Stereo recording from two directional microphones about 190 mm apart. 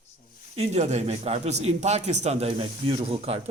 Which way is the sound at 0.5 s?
35° right (ahead or behind).